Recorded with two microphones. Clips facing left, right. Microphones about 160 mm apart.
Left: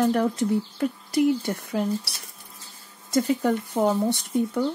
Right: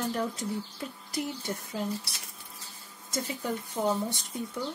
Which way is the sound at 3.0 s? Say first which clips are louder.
Left 11 dB; 60° left (ahead or behind).